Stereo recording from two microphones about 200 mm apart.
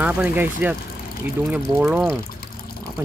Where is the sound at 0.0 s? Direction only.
5° right (ahead or behind).